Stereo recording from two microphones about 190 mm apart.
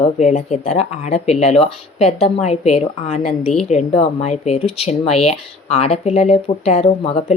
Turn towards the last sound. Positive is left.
turn(degrees=30)  # may be behind; listen again after turning